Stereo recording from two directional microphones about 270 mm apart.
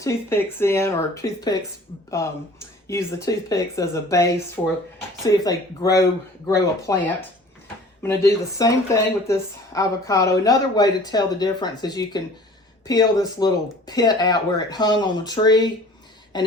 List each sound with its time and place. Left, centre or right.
0.0 s speech: centre
8.0 s speech: centre
16.3 s a sound: centre